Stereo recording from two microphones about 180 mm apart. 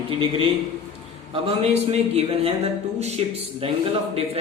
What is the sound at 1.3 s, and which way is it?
A man's voice, 30° right (ahead or behind).